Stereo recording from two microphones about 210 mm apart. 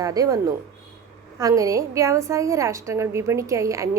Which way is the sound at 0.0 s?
15° right (ahead or behind).